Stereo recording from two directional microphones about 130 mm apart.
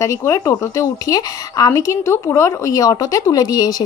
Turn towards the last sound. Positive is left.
turn(degrees=30)  # may be behind; listen again after turning